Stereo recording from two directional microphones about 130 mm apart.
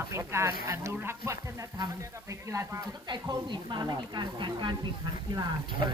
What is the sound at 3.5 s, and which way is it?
A woman's voice, 35° right (ahead or behind).